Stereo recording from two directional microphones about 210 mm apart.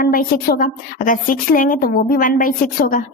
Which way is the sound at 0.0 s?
40° left (ahead or behind).